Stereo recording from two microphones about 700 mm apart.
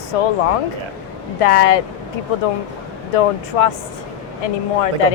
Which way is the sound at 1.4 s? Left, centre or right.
Left.